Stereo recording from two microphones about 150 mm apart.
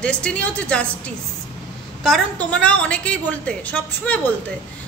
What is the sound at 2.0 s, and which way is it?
A woman's voice, 5° left (ahead or behind).